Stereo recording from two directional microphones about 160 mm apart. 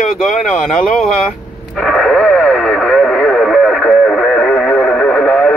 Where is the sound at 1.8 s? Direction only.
5° left (ahead or behind).